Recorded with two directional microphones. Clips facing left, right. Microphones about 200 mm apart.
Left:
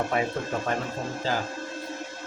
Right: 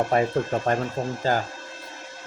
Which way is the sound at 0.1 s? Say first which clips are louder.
Right 5 dB; 40° right (ahead or behind).